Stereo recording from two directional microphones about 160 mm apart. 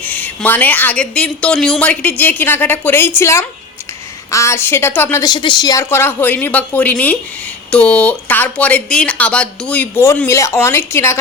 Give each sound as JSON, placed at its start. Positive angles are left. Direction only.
{"t": 0.0, "sound": "speech", "side_deg": 10}
{"t": 5.3, "sound": "speech", "side_deg": 30}